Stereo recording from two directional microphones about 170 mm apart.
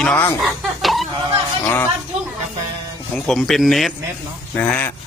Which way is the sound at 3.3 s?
Centre (ahead or behind).